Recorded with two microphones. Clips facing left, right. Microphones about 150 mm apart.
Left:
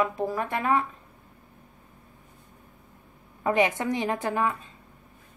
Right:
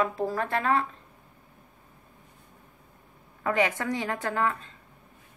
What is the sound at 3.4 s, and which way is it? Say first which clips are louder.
A woman's voice: left 2 dB; 20° left (ahead or behind).